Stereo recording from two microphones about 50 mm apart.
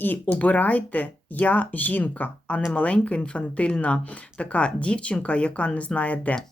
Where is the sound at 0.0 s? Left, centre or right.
Left.